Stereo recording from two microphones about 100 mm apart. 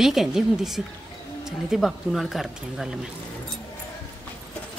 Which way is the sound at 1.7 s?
Centre (ahead or behind).